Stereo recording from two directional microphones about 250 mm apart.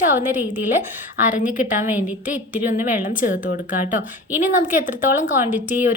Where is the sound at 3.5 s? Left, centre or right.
Left.